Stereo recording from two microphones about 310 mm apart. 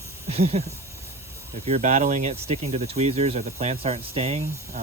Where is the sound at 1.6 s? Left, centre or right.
Right.